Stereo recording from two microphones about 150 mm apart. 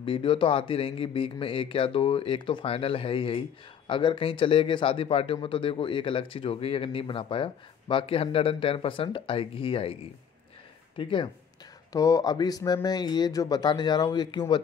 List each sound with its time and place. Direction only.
0.0 s speech: 35° left (ahead or behind)
11.0 s speech: 35° left (ahead or behind)